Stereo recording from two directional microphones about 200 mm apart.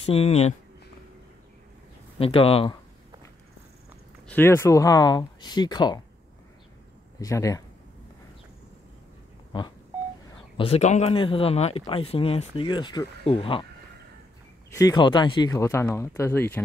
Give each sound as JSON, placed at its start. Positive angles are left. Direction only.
{"t": 0.1, "sound": "speech", "side_deg": 30}
{"t": 2.1, "sound": "speech", "side_deg": 30}
{"t": 4.3, "sound": "speech", "side_deg": 10}
{"t": 7.2, "sound": "speech", "side_deg": 15}
{"t": 10.6, "sound": "speech", "side_deg": 30}
{"t": 14.8, "sound": "speech", "side_deg": 20}